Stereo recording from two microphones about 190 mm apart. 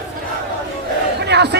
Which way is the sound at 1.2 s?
60° right (ahead or behind).